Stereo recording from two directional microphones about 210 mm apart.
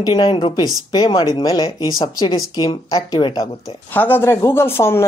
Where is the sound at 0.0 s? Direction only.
20° left (ahead or behind).